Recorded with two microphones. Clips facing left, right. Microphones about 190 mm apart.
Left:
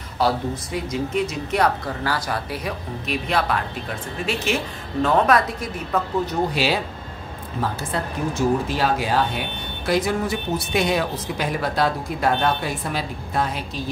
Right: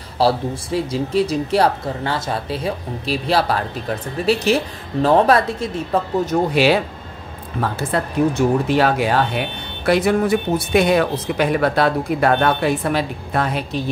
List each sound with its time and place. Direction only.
0.2 s speech: 30° right (ahead or behind)
6.5 s speech: 60° right (ahead or behind)
7.9 s speech: 65° right (ahead or behind)